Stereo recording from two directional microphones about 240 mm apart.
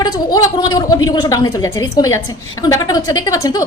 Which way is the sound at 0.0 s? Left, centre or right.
Centre.